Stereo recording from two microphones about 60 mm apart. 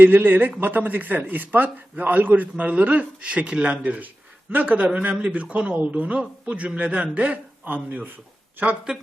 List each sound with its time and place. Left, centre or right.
0.0 s a man's voice: right